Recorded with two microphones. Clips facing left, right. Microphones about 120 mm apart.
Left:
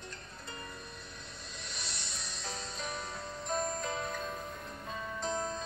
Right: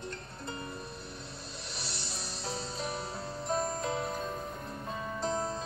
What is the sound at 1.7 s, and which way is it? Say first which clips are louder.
Music: right 4 dB; 30° right (ahead or behind).